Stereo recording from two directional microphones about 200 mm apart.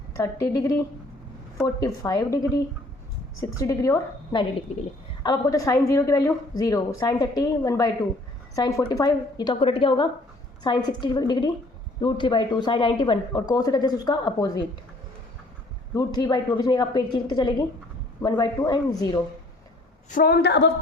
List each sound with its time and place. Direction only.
0.1 s a woman's voice: 15° left (ahead or behind)
16.0 s a woman's voice: 20° left (ahead or behind)
20.1 s a woman's voice: 45° left (ahead or behind)